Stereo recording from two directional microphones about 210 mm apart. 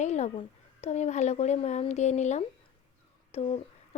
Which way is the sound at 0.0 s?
35° left (ahead or behind).